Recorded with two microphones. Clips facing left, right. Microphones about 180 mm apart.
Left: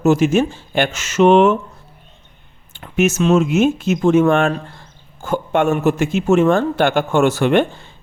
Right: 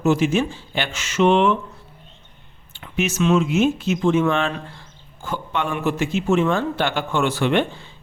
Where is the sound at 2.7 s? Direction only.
45° left (ahead or behind).